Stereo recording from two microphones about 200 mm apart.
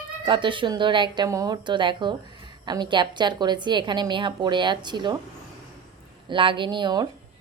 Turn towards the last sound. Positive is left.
turn(degrees=-20)  # may be behind; listen again after turning